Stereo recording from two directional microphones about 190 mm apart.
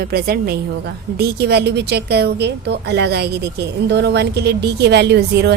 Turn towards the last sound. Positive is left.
turn(degrees=-60)  # may be behind; listen again after turning